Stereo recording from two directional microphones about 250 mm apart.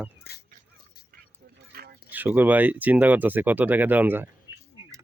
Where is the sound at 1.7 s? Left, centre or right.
Right.